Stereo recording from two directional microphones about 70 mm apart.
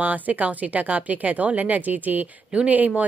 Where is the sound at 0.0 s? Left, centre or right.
Right.